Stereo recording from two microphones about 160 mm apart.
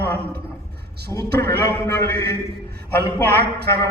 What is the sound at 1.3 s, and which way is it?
A man's voice, 90° right.